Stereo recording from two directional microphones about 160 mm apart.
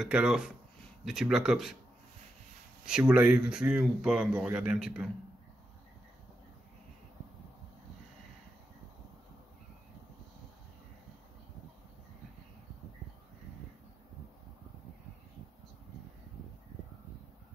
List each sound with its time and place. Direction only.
0.0 s speech: 5° right (ahead or behind)
2.8 s speech: 5° right (ahead or behind)